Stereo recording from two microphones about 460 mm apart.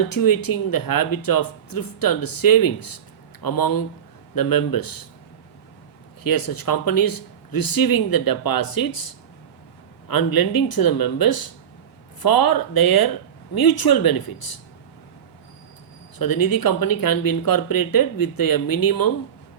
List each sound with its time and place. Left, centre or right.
0.1 s speech: left
6.2 s speech: left
16.1 s speech: left